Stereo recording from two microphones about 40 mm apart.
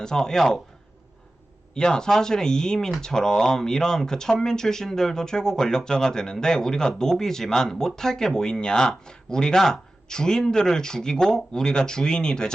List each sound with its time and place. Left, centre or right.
0.0 s speech: centre
1.7 s speech: centre